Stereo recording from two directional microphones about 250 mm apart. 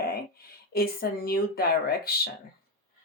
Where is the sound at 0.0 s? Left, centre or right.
Left.